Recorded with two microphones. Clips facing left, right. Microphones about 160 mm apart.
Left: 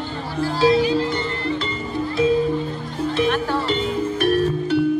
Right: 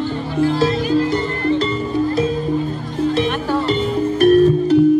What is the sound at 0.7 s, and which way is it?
Music, 45° right (ahead or behind).